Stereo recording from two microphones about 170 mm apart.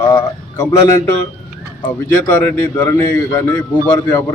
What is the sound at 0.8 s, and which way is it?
Speech, 15° left (ahead or behind).